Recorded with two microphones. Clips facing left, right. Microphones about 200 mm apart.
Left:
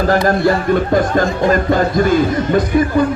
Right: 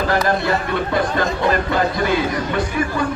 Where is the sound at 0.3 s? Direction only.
45° left (ahead or behind).